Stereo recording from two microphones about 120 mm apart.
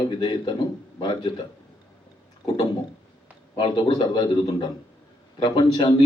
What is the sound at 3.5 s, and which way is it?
A man's voice, 35° left (ahead or behind).